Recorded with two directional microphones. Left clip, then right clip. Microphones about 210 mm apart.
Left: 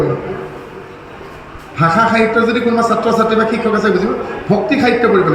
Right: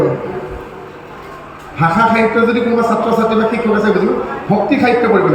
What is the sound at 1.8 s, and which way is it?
A man's voice, 55° left (ahead or behind).